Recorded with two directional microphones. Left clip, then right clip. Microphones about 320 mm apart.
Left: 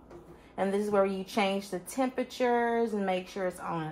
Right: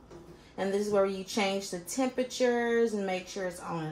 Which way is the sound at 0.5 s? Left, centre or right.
Centre.